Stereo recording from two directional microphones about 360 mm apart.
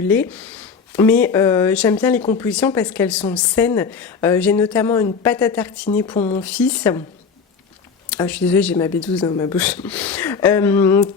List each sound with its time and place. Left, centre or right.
0.1 s a woman's voice: centre
6.0 s speech: centre
6.3 s a woman's voice: centre
8.1 s a woman's voice: centre